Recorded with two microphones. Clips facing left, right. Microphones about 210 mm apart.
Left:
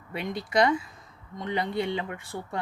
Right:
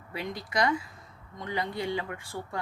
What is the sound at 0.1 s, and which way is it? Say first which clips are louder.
Speech: left 5 dB; 25° left (ahead or behind).